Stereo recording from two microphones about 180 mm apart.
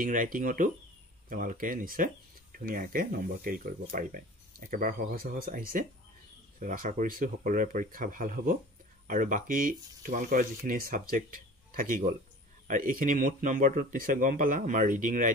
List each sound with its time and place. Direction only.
0.0 s speech: 50° right (ahead or behind)